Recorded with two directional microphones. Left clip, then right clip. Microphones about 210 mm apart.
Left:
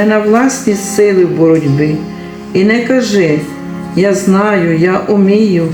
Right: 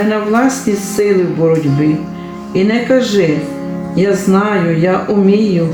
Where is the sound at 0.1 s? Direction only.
45° left (ahead or behind).